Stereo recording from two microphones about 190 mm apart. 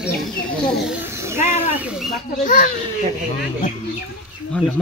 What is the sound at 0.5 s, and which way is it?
Speech, centre (ahead or behind).